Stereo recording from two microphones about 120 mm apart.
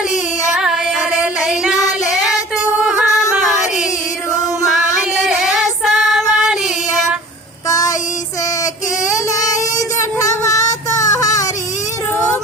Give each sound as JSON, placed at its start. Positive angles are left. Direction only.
{"t": 0.5, "sound": "music", "side_deg": -5}
{"t": 2.7, "sound": "music", "side_deg": -5}
{"t": 3.3, "sound": "female singing", "side_deg": 0}
{"t": 5.1, "sound": "female singing", "side_deg": 0}
{"t": 7.7, "sound": "a sound", "side_deg": 30}
{"t": 9.1, "sound": "child singing", "side_deg": 30}
{"t": 11.0, "sound": "a sound", "side_deg": 30}